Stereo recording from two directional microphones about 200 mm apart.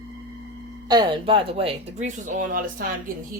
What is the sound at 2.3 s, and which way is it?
Speech, 45° right (ahead or behind).